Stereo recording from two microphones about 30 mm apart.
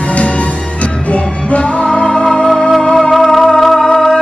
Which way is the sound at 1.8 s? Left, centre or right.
Left.